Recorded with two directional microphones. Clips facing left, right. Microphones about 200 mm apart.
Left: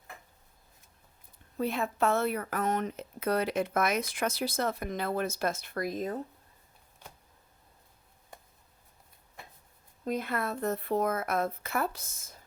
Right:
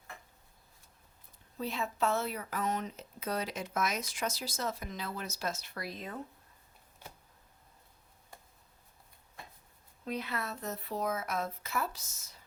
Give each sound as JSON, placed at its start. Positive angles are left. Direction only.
{"t": 1.5, "sound": "speech", "side_deg": 55}
{"t": 10.1, "sound": "speech", "side_deg": 50}